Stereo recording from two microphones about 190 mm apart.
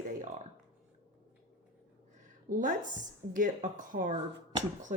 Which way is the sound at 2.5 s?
45° right (ahead or behind).